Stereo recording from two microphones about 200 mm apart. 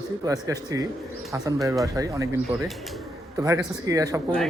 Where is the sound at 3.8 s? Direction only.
15° right (ahead or behind).